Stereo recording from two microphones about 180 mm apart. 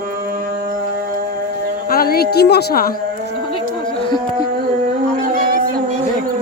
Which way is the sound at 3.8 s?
25° left (ahead or behind).